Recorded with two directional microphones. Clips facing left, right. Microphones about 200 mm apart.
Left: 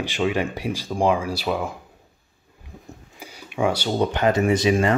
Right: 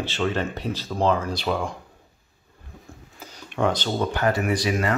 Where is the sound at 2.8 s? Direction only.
10° left (ahead or behind).